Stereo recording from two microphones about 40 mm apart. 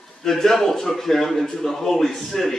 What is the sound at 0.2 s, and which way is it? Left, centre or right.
A man's voice, centre.